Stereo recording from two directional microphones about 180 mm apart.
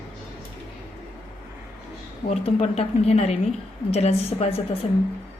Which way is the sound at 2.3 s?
35° left (ahead or behind).